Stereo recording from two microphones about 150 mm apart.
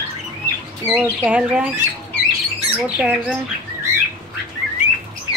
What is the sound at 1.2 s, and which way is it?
Speech, 5° right (ahead or behind).